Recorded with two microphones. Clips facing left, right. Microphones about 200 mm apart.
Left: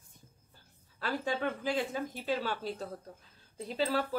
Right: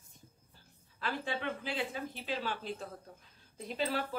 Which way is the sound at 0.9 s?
40° left (ahead or behind).